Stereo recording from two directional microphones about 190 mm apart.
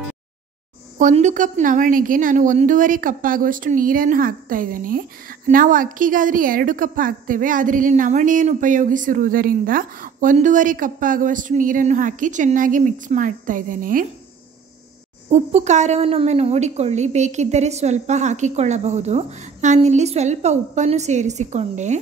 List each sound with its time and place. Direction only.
0.9 s a woman's voice: 40° right (ahead or behind)
15.2 s a woman's voice: 35° right (ahead or behind)